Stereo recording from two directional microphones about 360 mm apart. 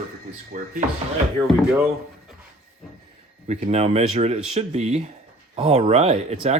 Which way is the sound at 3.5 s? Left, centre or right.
Centre.